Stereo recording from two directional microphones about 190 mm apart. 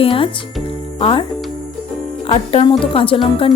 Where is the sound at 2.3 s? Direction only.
25° left (ahead or behind).